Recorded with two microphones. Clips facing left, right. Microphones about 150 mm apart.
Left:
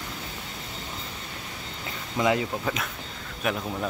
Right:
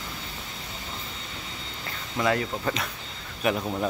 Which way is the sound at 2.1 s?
20° left (ahead or behind).